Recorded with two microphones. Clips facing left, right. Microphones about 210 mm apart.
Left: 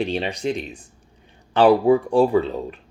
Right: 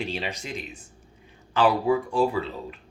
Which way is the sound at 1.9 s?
35° left (ahead or behind).